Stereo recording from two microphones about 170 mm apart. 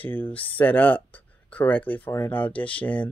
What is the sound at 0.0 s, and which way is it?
Speech, 10° left (ahead or behind).